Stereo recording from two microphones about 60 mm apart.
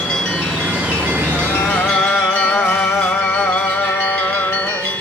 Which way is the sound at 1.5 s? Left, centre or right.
Left.